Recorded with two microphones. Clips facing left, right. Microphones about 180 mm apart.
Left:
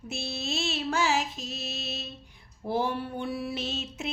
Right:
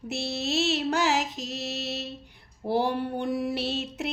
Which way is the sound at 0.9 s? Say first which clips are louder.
Right 2 dB; 15° right (ahead or behind).